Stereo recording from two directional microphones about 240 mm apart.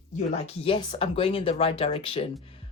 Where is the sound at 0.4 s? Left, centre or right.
Left.